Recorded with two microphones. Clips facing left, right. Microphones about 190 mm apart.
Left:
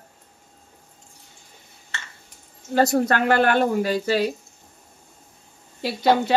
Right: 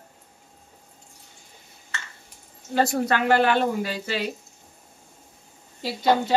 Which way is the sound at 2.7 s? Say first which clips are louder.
Left 3 dB; 45° left (ahead or behind).